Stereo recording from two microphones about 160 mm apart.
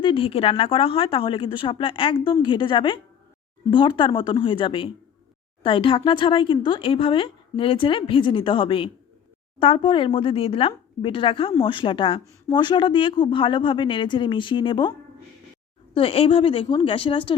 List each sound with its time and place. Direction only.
0.0 s speech: 35° left (ahead or behind)
16.0 s speech: 35° left (ahead or behind)